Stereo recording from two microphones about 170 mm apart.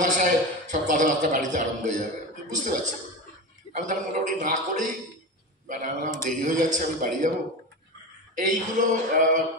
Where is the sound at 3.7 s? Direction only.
45° right (ahead or behind).